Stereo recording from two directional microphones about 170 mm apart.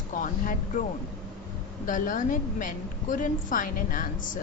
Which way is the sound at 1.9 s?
50° left (ahead or behind).